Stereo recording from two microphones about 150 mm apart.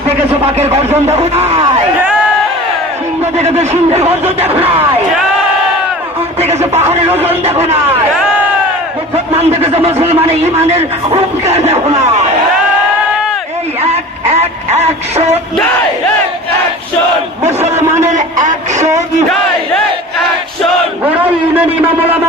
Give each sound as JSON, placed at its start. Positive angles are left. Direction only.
{"t": 0.5, "sound": "a man's voice", "side_deg": -45}
{"t": 0.8, "sound": "a man's voice", "side_deg": -15}
{"t": 1.1, "sound": "a man's voice", "side_deg": -45}
{"t": 3.3, "sound": "a man's voice", "side_deg": -45}
{"t": 6.7, "sound": "a man's voice", "side_deg": -45}
{"t": 9.4, "sound": "a man's voice", "side_deg": -40}
{"t": 13.9, "sound": "a sound", "side_deg": -45}
{"t": 17.4, "sound": "a man's voice", "side_deg": -45}
{"t": 21.0, "sound": "a man's voice", "side_deg": -10}